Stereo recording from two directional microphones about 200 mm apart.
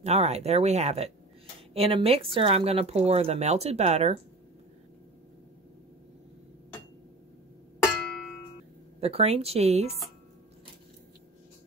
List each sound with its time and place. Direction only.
0.0 s speech: 30° right (ahead or behind)
7.8 s a sound: centre (ahead or behind)
9.0 s speech: 30° right (ahead or behind)